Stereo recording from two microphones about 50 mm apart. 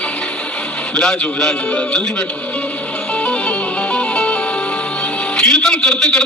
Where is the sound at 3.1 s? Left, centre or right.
Left.